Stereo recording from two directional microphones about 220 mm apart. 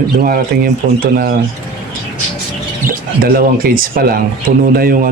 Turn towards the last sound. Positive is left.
turn(degrees=-40)  # may be behind; listen again after turning